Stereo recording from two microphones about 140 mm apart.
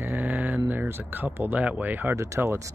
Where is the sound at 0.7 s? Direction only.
15° right (ahead or behind).